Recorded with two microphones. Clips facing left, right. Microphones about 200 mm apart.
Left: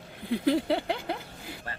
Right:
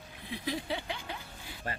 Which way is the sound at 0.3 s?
60° left (ahead or behind).